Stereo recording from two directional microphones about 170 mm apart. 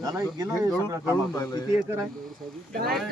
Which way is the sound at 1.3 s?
20° left (ahead or behind).